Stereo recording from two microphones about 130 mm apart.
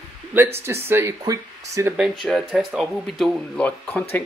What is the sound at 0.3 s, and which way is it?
Speech, 10° right (ahead or behind).